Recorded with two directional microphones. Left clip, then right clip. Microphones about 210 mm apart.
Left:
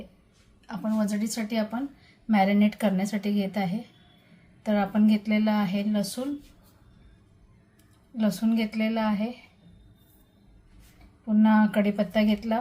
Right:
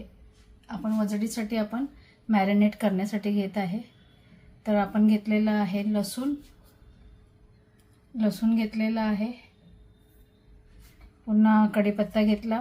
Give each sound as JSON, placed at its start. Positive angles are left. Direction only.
{"t": 0.7, "sound": "a woman's voice", "side_deg": 25}
{"t": 8.2, "sound": "a woman's voice", "side_deg": 25}
{"t": 11.3, "sound": "a woman's voice", "side_deg": 15}